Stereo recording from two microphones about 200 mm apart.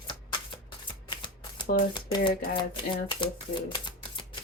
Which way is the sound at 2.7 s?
25° left (ahead or behind).